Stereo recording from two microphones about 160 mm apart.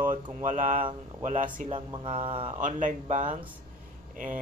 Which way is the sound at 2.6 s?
55° right (ahead or behind).